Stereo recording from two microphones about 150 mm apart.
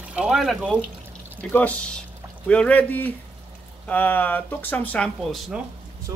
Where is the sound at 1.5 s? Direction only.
10° left (ahead or behind).